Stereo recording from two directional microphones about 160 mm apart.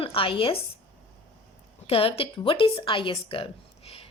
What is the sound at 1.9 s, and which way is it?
A woman's voice, 35° left (ahead or behind).